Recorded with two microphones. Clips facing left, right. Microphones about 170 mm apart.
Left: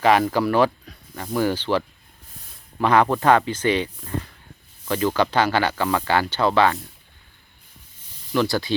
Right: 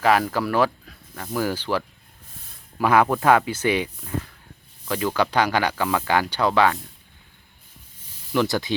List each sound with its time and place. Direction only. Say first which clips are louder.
0.0 s speech: left 2 dB; centre (ahead or behind)
8.3 s speech: left 1 dB; 15° right (ahead or behind)